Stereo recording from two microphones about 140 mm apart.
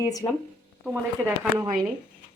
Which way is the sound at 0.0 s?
25° left (ahead or behind).